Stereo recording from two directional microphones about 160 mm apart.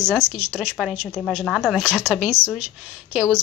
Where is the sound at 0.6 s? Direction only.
Centre (ahead or behind).